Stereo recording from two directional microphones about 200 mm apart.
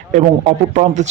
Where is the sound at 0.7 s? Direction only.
35° right (ahead or behind).